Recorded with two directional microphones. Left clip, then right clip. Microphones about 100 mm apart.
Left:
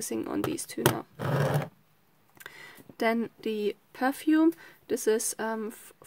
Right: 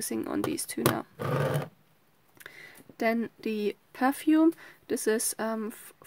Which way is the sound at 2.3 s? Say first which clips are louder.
Left 1 dB; 5° right (ahead or behind).